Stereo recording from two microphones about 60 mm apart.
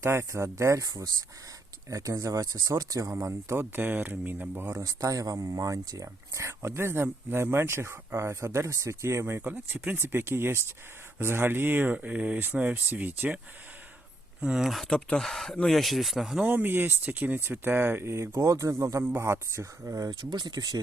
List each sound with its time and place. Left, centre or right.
0.0 s speech: right
1.9 s speech: right
3.2 s speech: right
3.6 s speech: right
4.7 s speech: right
9.2 s speech: right
10.0 s speech: right
14.4 s speech: centre
14.8 s speech: centre
16.4 s speech: right
19.0 s speech: right
20.6 s speech: right